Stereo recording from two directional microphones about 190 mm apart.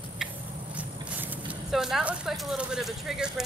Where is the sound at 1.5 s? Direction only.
Centre (ahead or behind).